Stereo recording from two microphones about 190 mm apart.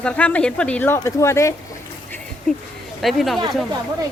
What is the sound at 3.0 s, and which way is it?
Speech, centre (ahead or behind).